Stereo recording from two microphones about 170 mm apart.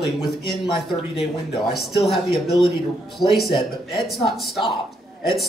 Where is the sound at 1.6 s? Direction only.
Centre (ahead or behind).